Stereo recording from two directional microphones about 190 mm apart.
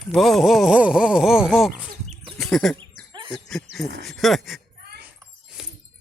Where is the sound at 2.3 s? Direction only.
Centre (ahead or behind).